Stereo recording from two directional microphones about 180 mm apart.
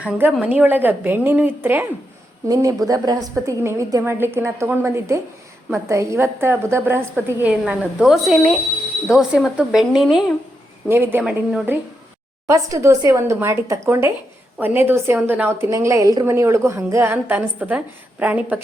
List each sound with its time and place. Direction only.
0.0 s a woman's voice: 10° right (ahead or behind)